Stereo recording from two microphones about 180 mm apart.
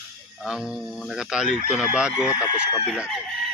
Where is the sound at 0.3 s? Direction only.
Centre (ahead or behind).